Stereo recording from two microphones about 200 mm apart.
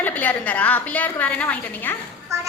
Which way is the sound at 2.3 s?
15° right (ahead or behind).